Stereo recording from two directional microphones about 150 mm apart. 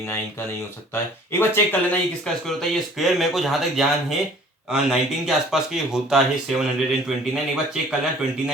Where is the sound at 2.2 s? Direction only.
Centre (ahead or behind).